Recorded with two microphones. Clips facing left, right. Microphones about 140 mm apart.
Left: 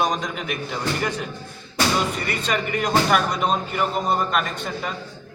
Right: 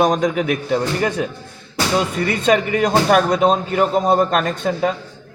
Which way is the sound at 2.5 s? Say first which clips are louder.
Right 7 dB; 45° right (ahead or behind).